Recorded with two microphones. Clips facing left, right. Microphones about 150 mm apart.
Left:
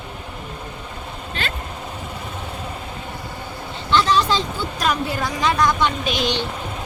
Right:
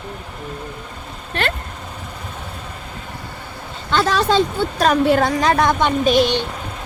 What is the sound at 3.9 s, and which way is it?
A woman's voice, 55° right (ahead or behind).